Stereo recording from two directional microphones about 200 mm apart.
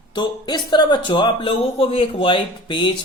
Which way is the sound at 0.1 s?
20° left (ahead or behind).